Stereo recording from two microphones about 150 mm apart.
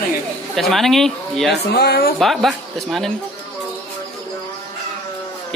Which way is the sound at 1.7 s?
90° left.